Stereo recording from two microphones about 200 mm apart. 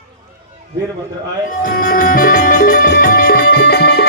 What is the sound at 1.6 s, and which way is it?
Music, 45° left (ahead or behind).